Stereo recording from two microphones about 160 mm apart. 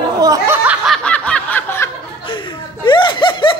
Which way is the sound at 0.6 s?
Centre (ahead or behind).